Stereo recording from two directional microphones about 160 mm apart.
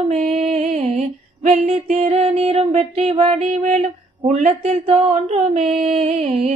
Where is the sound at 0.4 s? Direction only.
40° right (ahead or behind).